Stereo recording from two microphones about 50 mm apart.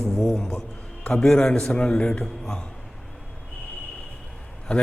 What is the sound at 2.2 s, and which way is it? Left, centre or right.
Speech, centre.